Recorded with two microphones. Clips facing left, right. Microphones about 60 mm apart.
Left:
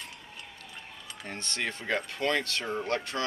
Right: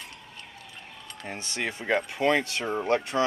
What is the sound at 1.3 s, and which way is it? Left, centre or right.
Speech, centre.